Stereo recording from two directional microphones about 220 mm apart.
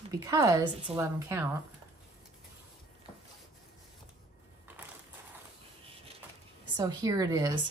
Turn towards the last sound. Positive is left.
turn(degrees=-15)  # may be behind; listen again after turning